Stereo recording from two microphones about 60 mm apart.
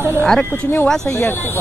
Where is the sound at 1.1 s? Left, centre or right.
Left.